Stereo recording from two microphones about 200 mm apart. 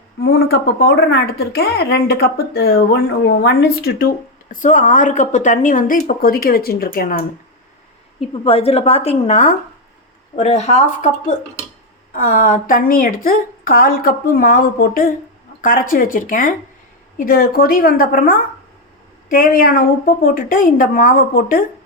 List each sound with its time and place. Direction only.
0.3 s speech: 50° left (ahead or behind)
8.3 s a woman's voice: 30° left (ahead or behind); by 21.6 s 45° left (ahead or behind)